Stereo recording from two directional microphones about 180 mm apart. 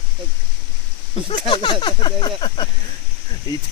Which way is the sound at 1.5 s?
25° left (ahead or behind).